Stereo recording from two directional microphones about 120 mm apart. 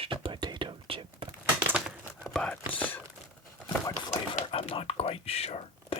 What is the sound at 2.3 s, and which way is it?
Whispering, 5° left (ahead or behind).